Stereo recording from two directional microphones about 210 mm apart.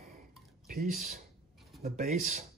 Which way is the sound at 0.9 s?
40° right (ahead or behind).